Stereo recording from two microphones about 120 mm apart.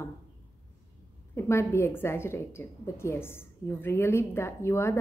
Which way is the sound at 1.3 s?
20° left (ahead or behind).